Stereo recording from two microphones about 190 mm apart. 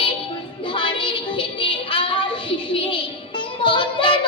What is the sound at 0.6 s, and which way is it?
Child singing, 25° left (ahead or behind).